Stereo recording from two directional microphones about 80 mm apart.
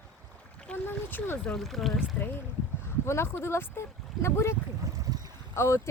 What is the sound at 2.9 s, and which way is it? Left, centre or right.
Speech, left.